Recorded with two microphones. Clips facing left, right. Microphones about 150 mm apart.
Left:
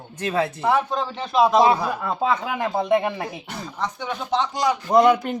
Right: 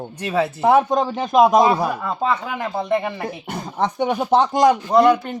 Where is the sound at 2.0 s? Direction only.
5° left (ahead or behind).